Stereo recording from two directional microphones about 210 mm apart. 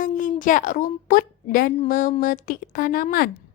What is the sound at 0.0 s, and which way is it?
A woman's voice, 40° left (ahead or behind).